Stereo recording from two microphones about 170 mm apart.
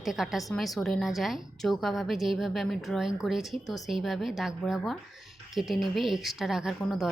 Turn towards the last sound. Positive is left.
turn(degrees=0)  # may be behind; listen again after turning